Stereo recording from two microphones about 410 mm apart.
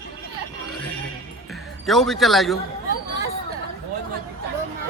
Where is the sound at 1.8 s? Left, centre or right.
Centre.